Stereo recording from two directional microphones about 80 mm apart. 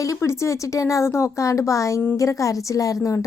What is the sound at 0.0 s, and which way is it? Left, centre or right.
A woman's voice, left.